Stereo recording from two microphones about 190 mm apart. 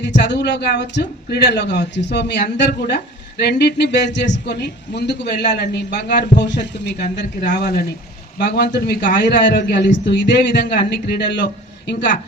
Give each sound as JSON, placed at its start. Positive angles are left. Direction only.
{"t": 0.0, "sound": "speech", "side_deg": 65}
{"t": 9.1, "sound": "speech", "side_deg": 65}